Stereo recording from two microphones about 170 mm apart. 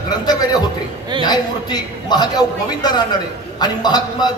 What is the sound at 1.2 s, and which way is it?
A man's voice, 25° left (ahead or behind).